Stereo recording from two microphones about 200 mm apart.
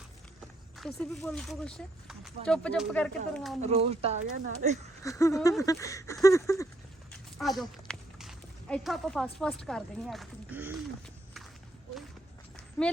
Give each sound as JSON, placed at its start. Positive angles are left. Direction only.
{"t": 0.8, "sound": "speech", "side_deg": 0}
{"t": 3.6, "sound": "speech", "side_deg": -30}
{"t": 5.0, "sound": "a sound", "side_deg": 15}
{"t": 7.1, "sound": "speech", "side_deg": 0}